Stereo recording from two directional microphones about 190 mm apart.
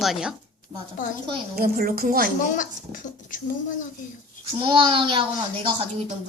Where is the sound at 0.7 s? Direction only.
15° right (ahead or behind).